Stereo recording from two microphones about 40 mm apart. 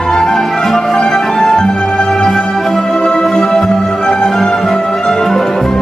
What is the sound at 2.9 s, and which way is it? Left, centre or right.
Music, centre.